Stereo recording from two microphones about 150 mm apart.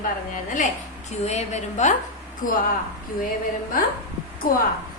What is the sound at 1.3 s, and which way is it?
Speech, 50° left (ahead or behind).